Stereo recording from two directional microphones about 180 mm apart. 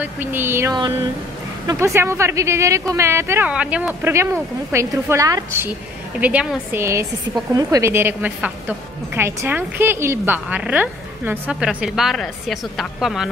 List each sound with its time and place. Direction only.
0.0 s a woman's voice: 10° right (ahead or behind)